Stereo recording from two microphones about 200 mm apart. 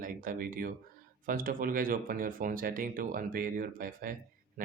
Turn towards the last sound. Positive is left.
turn(degrees=-45)  # may be behind; listen again after turning